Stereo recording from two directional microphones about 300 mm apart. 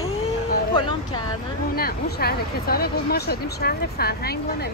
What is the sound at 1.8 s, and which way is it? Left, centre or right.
Speech, left.